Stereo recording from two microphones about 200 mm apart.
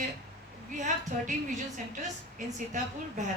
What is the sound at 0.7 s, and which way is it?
A woman's voice, 40° right (ahead or behind).